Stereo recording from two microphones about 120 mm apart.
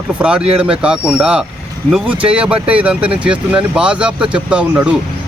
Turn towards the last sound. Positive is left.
turn(degrees=-10)  # may be behind; listen again after turning